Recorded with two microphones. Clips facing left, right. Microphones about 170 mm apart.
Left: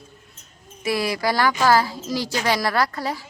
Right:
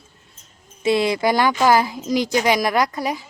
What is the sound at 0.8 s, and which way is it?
A woman's voice, 25° right (ahead or behind).